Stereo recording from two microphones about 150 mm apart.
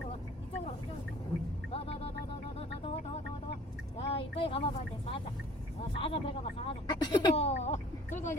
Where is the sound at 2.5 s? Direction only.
40° left (ahead or behind).